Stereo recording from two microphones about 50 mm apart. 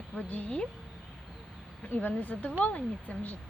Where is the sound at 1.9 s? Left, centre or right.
Left.